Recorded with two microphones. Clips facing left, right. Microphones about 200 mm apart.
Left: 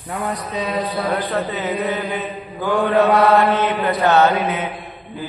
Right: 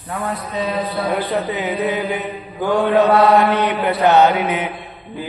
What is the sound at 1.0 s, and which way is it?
Chant, 15° right (ahead or behind).